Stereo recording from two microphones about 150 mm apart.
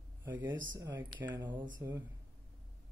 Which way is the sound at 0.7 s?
25° right (ahead or behind).